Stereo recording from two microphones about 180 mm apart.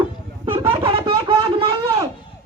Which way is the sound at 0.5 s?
30° right (ahead or behind).